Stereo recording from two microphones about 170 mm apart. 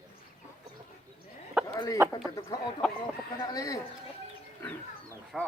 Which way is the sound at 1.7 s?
20° left (ahead or behind).